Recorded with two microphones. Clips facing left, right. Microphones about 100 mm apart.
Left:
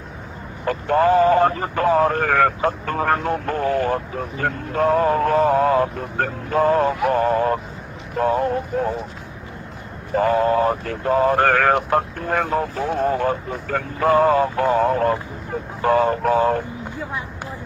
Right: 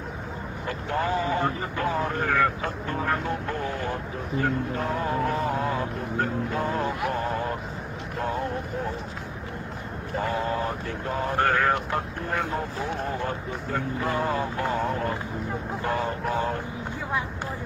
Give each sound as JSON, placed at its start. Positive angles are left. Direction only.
{"t": 0.6, "sound": "speech", "side_deg": 65}
{"t": 10.2, "sound": "speech", "side_deg": 70}